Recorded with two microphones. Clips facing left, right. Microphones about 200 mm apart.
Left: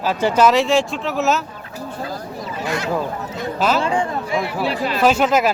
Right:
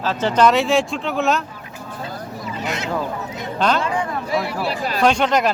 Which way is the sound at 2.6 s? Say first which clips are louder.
Left 3 dB; 20° right (ahead or behind).